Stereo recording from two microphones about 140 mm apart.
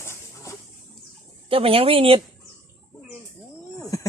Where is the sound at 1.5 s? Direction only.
40° right (ahead or behind).